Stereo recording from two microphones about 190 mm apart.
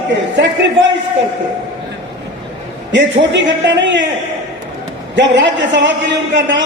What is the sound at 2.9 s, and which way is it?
A man's voice, 75° right (ahead or behind).